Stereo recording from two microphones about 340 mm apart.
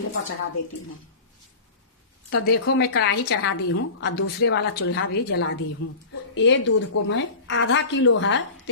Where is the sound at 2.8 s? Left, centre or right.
Left.